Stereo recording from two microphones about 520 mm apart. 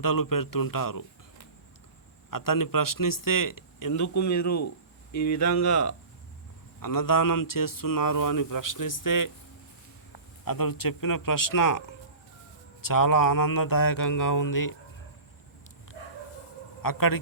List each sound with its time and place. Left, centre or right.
0.0 s speech: left
2.3 s speech: left
10.4 s speech: left
12.8 s speech: left
16.8 s speech: left